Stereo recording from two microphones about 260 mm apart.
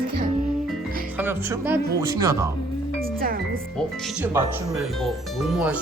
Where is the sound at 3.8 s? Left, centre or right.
Centre.